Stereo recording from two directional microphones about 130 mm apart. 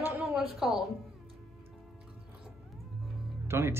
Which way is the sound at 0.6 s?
5° right (ahead or behind).